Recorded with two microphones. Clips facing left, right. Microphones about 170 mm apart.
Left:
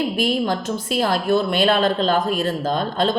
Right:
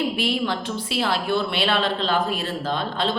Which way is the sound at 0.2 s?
45° left (ahead or behind).